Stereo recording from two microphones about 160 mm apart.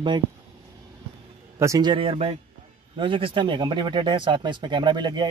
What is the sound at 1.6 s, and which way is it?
Speech, 25° right (ahead or behind).